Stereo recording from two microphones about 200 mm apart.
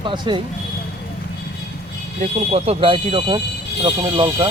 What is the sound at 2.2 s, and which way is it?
Speech, 30° right (ahead or behind).